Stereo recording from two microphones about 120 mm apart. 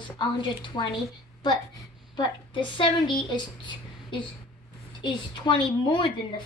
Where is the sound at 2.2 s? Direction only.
40° left (ahead or behind).